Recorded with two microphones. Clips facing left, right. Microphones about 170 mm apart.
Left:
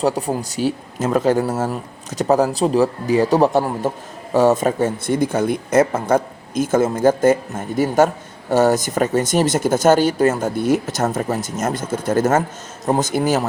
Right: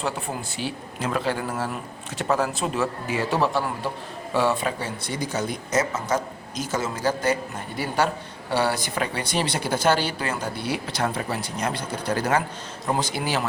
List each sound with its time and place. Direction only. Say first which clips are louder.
0.0 s speech: left 9 dB; 40° left (ahead or behind)